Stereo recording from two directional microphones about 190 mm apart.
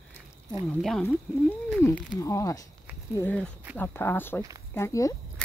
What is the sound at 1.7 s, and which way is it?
Speech, 10° left (ahead or behind).